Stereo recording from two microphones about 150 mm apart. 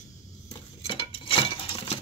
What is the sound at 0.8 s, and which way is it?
Patter, 40° left (ahead or behind).